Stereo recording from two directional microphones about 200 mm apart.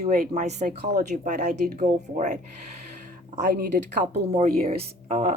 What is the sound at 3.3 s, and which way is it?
Speech, 50° right (ahead or behind).